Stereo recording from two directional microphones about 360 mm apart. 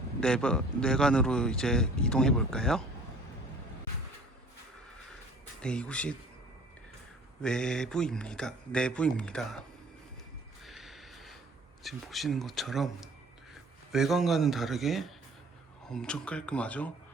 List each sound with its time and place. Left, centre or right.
0.2 s a man's voice: centre
5.6 s a man's voice: centre
7.4 s a man's voice: centre
10.7 s snort: centre
11.8 s a man's voice: centre